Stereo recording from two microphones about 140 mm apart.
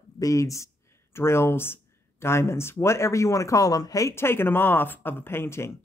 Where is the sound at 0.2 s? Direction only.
25° left (ahead or behind).